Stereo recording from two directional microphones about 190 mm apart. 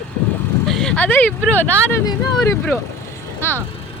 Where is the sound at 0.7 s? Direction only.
5° left (ahead or behind).